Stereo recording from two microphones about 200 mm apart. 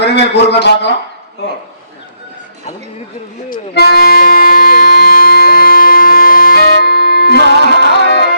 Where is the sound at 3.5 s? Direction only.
50° left (ahead or behind).